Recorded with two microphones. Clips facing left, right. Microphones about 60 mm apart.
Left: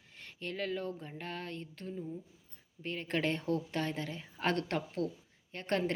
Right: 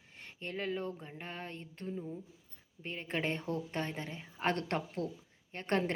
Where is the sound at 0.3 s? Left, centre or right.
Right.